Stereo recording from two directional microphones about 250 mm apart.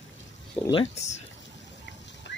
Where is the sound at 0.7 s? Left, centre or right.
Left.